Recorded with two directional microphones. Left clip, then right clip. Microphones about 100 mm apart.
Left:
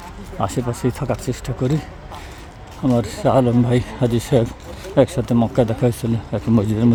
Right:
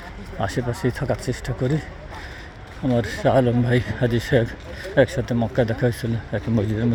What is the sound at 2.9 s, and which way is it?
Speech, 25° left (ahead or behind).